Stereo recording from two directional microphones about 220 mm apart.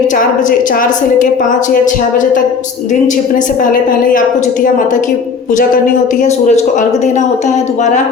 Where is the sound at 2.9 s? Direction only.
35° left (ahead or behind).